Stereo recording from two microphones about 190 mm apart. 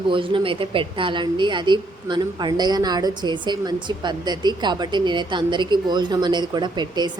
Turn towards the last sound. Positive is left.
turn(degrees=-25)  # may be behind; listen again after turning